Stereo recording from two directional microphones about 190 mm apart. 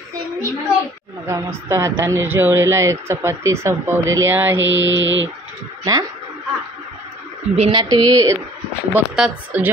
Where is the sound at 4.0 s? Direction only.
90° right.